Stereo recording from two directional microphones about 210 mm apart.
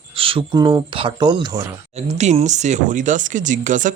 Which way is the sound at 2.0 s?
30° right (ahead or behind).